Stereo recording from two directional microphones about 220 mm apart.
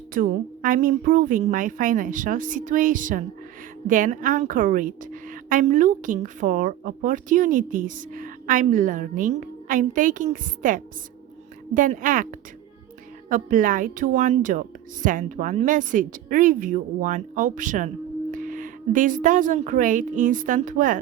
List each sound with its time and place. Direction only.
0.1 s a woman's voice: 40° right (ahead or behind)